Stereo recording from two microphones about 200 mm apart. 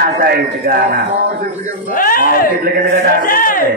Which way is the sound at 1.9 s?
45° left (ahead or behind).